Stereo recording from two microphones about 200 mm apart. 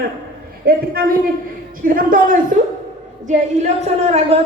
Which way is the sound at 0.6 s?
50° right (ahead or behind).